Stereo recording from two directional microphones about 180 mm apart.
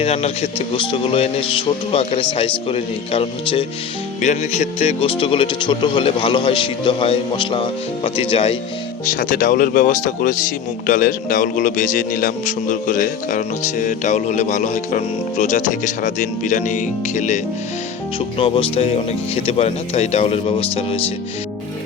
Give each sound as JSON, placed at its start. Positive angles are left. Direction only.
{"t": 0.0, "sound": "speech", "side_deg": 35}
{"t": 9.1, "sound": "speech", "side_deg": 50}